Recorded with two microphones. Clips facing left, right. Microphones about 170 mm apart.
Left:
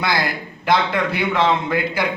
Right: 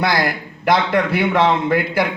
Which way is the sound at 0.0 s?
55° right (ahead or behind).